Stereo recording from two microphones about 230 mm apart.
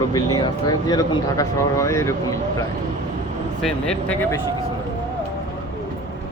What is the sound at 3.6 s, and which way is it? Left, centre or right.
Speech, centre.